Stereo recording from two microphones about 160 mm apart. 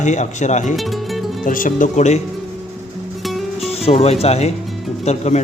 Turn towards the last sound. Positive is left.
turn(degrees=45)  # may be behind; listen again after turning